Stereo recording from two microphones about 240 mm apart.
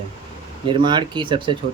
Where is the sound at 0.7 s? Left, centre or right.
Centre.